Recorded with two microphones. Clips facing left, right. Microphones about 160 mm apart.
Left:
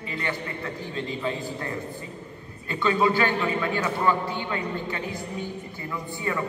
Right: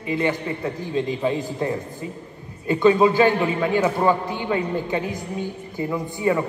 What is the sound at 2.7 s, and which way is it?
A man's voice, 20° right (ahead or behind).